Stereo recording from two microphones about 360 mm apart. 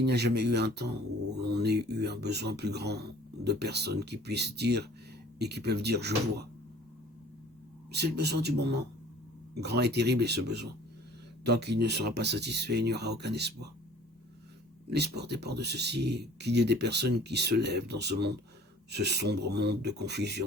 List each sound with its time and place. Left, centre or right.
0.0 s speech: right
7.9 s speech: right
14.8 s speech: right